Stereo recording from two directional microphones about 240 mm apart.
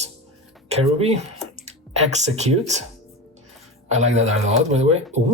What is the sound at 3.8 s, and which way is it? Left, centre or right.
Speech, right.